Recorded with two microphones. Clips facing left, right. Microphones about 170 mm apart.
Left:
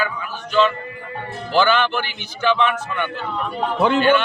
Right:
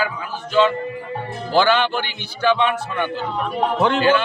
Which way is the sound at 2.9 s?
30° right (ahead or behind).